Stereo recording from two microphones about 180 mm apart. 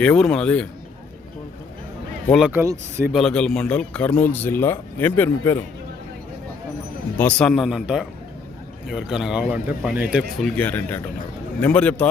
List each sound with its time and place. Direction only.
0.0 s speech: 5° left (ahead or behind)
2.5 s speech: 15° right (ahead or behind)
3.1 s a man's voice: centre (ahead or behind)
7.2 s speech: 5° left (ahead or behind)
10.6 s a man's voice: 10° left (ahead or behind)